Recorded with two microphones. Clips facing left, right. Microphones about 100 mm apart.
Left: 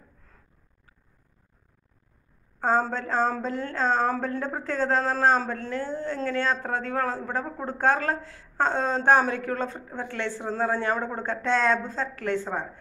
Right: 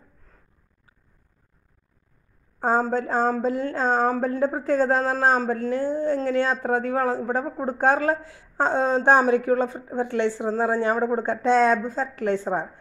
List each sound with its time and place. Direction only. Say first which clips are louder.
2.6 s speech: right 2 dB; 10° right (ahead or behind)